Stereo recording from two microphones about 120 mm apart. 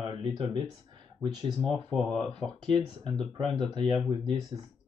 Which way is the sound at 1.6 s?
5° left (ahead or behind).